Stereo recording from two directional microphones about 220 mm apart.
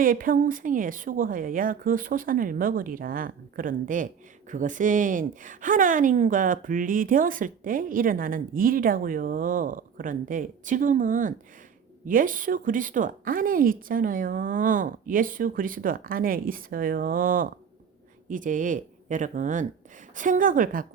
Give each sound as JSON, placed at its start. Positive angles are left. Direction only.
{"t": 0.0, "sound": "a woman's voice", "side_deg": -40}